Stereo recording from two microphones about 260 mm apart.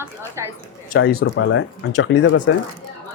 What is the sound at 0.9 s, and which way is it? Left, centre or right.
Speech, left.